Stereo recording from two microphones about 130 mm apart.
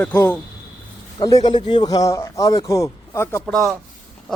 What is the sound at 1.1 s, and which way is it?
A man's voice, 30° left (ahead or behind).